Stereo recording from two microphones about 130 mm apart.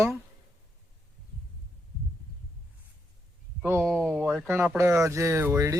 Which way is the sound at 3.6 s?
20° right (ahead or behind).